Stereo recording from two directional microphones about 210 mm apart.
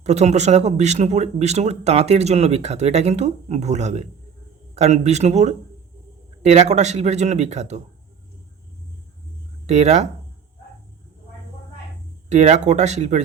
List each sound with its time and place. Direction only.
0.0 s speech: 30° right (ahead or behind)
9.6 s speech: 30° right (ahead or behind)
12.3 s speech: 35° right (ahead or behind)